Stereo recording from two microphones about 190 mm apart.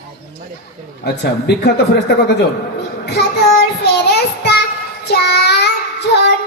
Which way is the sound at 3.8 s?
60° left (ahead or behind).